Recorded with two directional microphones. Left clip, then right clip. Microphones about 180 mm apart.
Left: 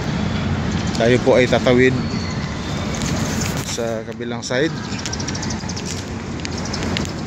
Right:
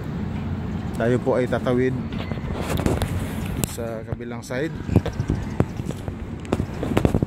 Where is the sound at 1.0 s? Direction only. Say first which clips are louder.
Left 7 dB; 15° right (ahead or behind).